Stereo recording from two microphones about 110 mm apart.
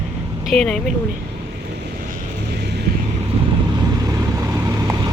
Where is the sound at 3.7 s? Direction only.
30° right (ahead or behind).